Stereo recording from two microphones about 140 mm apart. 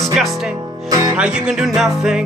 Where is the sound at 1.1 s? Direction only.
5° right (ahead or behind).